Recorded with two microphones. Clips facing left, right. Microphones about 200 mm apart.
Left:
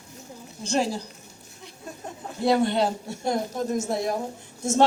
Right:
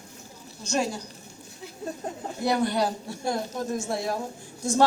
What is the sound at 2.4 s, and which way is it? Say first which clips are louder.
Speech: left 3 dB; 25° left (ahead or behind).